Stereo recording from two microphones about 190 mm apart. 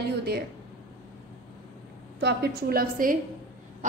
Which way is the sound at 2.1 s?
60° right (ahead or behind).